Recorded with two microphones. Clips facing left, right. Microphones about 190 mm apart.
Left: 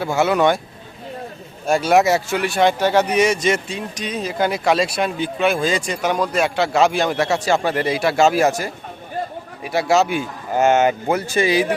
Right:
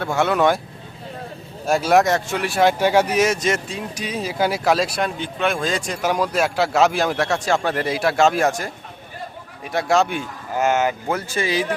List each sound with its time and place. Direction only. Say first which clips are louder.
0.0 s speech: left 2 dB; 5° left (ahead or behind)
1.6 s speech: left 1 dB; centre (ahead or behind)
10.5 s speech: left 4 dB; 25° left (ahead or behind)